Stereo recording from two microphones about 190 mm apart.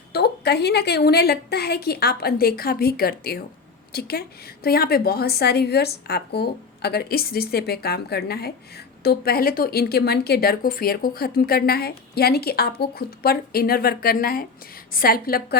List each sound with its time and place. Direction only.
0.1 s a woman's voice: 60° left (ahead or behind)